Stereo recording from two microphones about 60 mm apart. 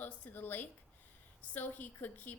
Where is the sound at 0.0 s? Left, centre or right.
Left.